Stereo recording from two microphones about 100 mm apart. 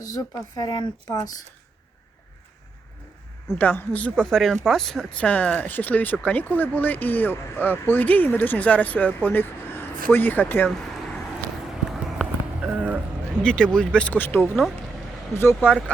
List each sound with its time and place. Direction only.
0.0 s speech: 40° left (ahead or behind)
3.6 s speech: 15° left (ahead or behind)
4.1 s speech: 5° left (ahead or behind)
11.7 s run: 5° right (ahead or behind)
13.4 s speech: 10° left (ahead or behind); by 15.7 s 25° left (ahead or behind)